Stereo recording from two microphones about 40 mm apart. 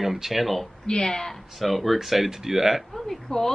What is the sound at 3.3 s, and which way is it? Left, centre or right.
Speech, centre.